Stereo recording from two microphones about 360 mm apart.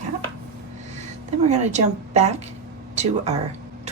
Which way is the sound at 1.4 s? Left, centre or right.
Centre.